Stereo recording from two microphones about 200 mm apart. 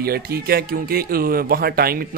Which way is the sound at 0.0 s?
50° right (ahead or behind).